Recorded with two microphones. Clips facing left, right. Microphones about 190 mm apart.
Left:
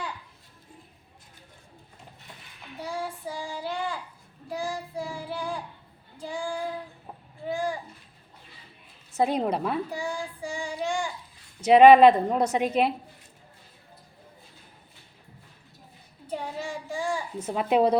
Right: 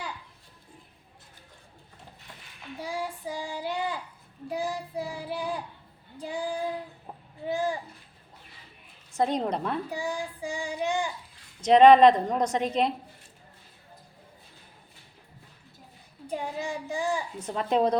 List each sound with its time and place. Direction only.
2.9 s child singing: 15° right (ahead or behind)
9.1 s a woman's voice: 10° left (ahead or behind)
9.9 s child singing: 15° right (ahead or behind)
11.6 s a woman's voice: 10° left (ahead or behind)
16.2 s child singing: 15° right (ahead or behind)
17.4 s a woman's voice: 10° left (ahead or behind)